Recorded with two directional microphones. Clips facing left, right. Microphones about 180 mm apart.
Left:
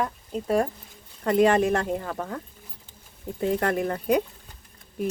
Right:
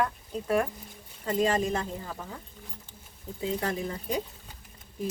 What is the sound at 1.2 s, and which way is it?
Speech, 70° left (ahead or behind).